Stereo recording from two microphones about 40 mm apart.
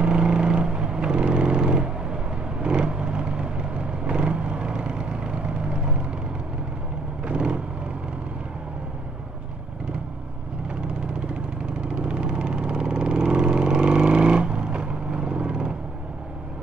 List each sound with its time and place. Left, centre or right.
0.0 s vehicle: right
7.2 s vehicle: right
11.7 s vehicle: right